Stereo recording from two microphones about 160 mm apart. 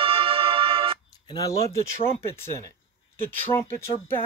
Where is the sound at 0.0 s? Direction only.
35° right (ahead or behind).